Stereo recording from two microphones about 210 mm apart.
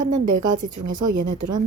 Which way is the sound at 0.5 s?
40° right (ahead or behind).